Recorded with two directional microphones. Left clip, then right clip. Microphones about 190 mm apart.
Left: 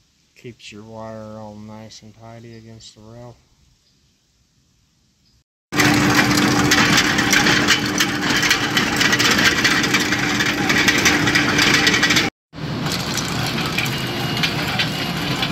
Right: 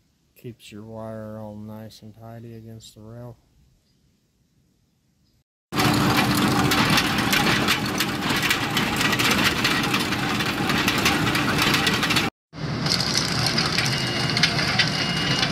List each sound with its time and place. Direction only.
0.4 s speech: 35° right (ahead or behind)
5.9 s a sound: 10° right (ahead or behind)
6.7 s engine: 15° right (ahead or behind)
12.8 s vehicle: 5° left (ahead or behind)